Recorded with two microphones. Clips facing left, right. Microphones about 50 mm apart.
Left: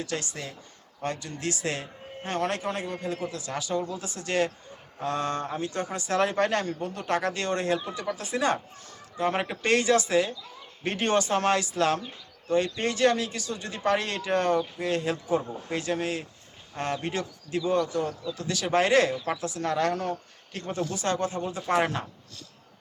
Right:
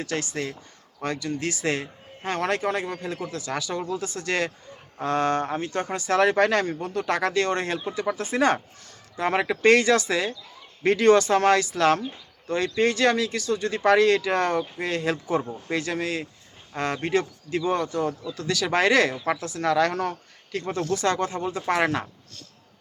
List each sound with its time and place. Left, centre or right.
0.0 s speech: right
1.6 s speech: right
2.2 s speech: right
2.6 s a man's voice: right
6.1 s speech: right
7.9 s speech: right
9.1 s speech: right
9.6 s a man's voice: right
11.7 s speech: right
13.5 s speech: right
15.7 s speech: right
16.7 s a man's voice: right